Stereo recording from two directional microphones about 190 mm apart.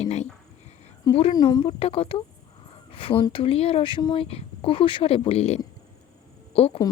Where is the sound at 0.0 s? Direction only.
35° left (ahead or behind).